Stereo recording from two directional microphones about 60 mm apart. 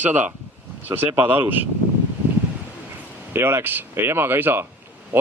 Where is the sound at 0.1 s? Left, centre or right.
Right.